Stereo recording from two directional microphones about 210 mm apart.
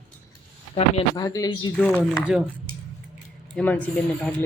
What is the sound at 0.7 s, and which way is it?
Speech, 20° left (ahead or behind).